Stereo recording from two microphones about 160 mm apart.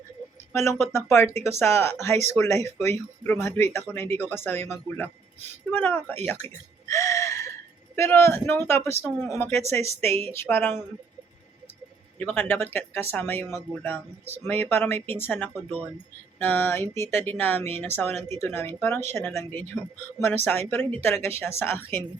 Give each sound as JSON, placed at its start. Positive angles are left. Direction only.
{"t": 0.5, "sound": "speech", "side_deg": 15}
{"t": 9.0, "sound": "speech", "side_deg": 0}
{"t": 9.3, "sound": "speech", "side_deg": 15}
{"t": 12.2, "sound": "speech", "side_deg": 15}